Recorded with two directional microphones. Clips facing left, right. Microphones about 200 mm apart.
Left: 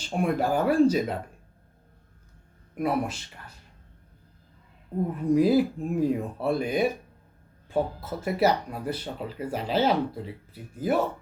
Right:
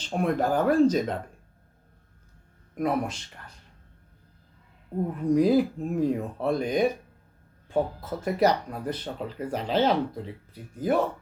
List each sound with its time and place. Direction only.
0.0 s speech: 10° left (ahead or behind)
2.7 s speech: 5° left (ahead or behind)
5.3 s speech: 5° left (ahead or behind)